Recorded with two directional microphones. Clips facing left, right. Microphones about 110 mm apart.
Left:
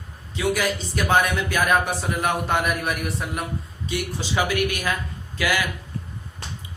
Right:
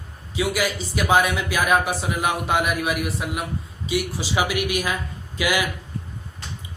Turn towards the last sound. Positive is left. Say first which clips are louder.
# right 1 dB
turn(degrees=-15)  # may be behind; listen again after turning